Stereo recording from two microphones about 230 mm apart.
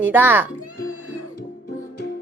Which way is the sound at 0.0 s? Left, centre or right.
Centre.